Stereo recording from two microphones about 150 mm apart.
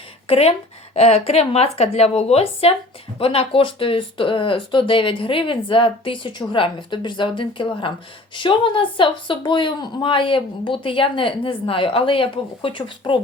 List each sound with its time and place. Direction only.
0.3 s a woman's voice: 45° left (ahead or behind)